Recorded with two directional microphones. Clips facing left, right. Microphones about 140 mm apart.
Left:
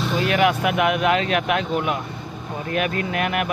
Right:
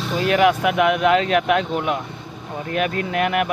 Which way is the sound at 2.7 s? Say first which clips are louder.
Right 2 dB; 25° right (ahead or behind).